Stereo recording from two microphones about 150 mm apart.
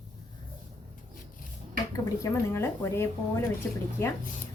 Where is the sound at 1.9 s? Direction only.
20° left (ahead or behind).